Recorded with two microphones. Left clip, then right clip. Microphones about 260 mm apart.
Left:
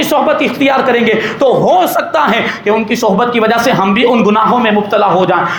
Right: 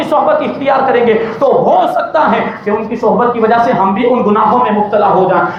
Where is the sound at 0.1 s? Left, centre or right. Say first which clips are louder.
Right 3 dB; left.